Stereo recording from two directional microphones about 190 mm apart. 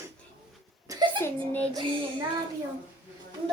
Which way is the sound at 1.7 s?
25° right (ahead or behind).